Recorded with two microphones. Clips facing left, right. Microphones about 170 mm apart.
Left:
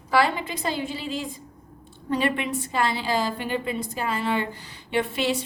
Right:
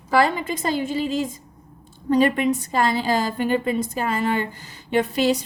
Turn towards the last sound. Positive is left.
turn(degrees=-40)  # may be behind; listen again after turning